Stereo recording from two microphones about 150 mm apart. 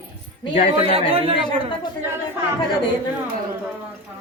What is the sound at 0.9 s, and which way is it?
Speech, 40° right (ahead or behind).